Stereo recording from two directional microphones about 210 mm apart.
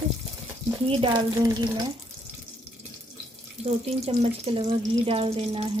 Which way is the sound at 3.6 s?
30° right (ahead or behind).